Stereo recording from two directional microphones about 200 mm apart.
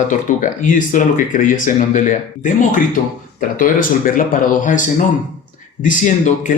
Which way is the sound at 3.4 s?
45° left (ahead or behind).